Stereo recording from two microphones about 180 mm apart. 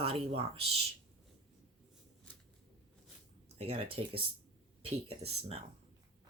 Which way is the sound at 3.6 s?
30° right (ahead or behind).